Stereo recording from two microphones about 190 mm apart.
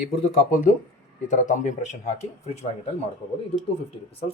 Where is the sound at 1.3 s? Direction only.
40° left (ahead or behind).